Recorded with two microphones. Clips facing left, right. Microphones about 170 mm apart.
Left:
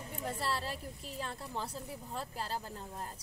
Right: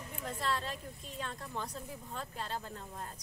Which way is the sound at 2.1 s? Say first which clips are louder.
Left 1 dB; 30° left (ahead or behind).